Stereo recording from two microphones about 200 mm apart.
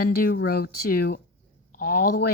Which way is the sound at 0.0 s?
50° left (ahead or behind).